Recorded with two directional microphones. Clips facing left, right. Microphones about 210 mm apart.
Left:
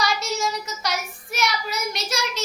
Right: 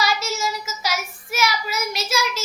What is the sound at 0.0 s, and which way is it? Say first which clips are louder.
Child singing: right 1 dB; 5° right (ahead or behind).